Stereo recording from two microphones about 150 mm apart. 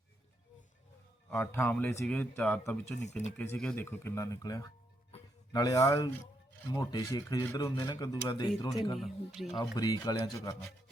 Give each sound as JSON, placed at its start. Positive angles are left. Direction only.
{"t": 1.3, "sound": "a man's voice", "side_deg": 15}
{"t": 3.0, "sound": "speech", "side_deg": 50}
{"t": 3.3, "sound": "a man's voice", "side_deg": 10}
{"t": 8.9, "sound": "speech", "side_deg": 0}
{"t": 9.6, "sound": "speech", "side_deg": 25}